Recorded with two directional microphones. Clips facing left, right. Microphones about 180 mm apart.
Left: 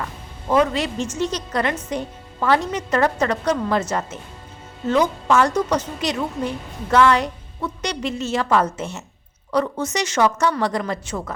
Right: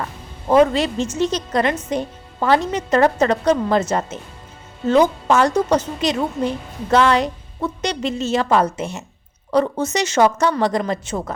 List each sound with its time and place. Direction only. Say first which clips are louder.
0.4 s a woman's voice: right 4 dB; 35° right (ahead or behind); by 9.0 s 15° right (ahead or behind)
9.5 s a woman's voice: right 3 dB; 25° right (ahead or behind)